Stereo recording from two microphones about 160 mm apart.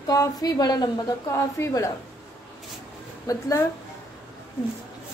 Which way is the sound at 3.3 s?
20° left (ahead or behind).